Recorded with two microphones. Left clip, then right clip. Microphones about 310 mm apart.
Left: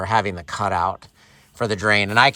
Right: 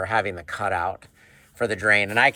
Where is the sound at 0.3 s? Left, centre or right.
Left.